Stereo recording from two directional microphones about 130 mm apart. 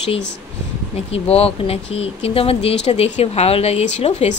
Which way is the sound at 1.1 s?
50° left (ahead or behind).